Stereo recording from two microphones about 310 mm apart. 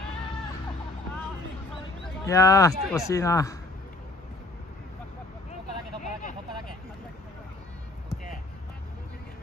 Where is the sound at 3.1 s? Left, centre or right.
Centre.